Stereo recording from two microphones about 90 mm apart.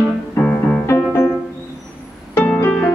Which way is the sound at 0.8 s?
30° left (ahead or behind).